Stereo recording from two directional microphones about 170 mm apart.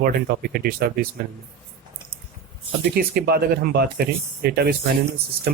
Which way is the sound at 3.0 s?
65° right (ahead or behind).